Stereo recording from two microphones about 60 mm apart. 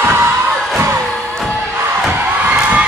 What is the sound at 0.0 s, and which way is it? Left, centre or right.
Music, right.